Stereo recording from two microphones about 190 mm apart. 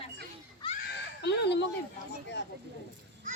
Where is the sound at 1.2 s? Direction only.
65° left (ahead or behind).